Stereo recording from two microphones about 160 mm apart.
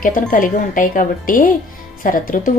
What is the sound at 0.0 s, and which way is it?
Speech, 60° left (ahead or behind).